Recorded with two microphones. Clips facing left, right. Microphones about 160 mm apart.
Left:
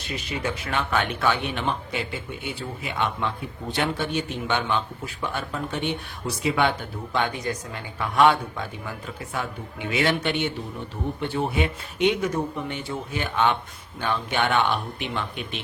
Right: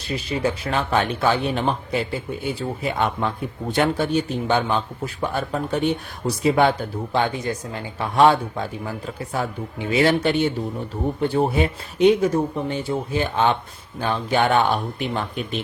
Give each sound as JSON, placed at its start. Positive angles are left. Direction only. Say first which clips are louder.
{"t": 0.1, "sound": "speech", "louder": "right 6 dB", "side_deg": -30}